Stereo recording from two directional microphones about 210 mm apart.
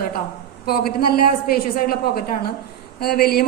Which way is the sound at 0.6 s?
45° left (ahead or behind).